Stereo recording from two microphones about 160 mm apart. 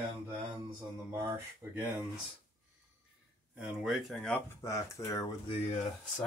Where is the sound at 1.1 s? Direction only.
15° right (ahead or behind).